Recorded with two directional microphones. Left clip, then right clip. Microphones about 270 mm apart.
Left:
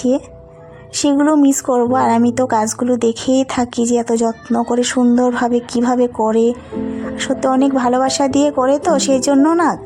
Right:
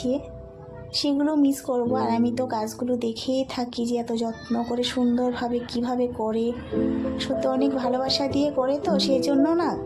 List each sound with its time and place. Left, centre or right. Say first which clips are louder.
1.0 s speech: left 10 dB; left